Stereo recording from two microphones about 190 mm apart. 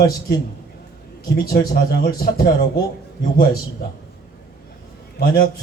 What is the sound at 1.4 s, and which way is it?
Speech, 55° left (ahead or behind).